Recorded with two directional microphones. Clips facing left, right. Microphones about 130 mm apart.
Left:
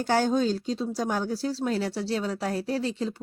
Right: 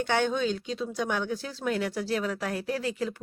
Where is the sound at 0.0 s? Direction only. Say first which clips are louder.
Left 3 dB; 35° left (ahead or behind).